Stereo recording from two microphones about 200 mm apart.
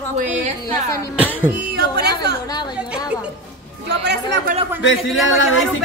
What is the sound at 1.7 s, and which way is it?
Speech, 55° right (ahead or behind).